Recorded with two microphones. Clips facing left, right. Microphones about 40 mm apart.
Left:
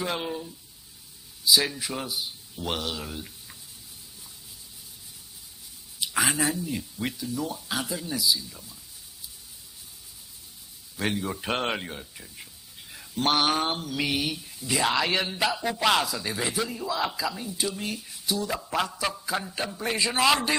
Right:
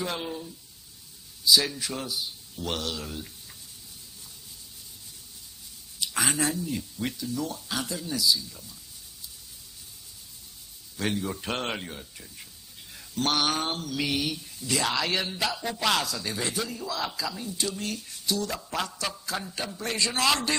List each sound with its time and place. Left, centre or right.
0.0 s mantra: centre
1.4 s a man's voice: centre
5.9 s mantra: centre
11.0 s mantra: centre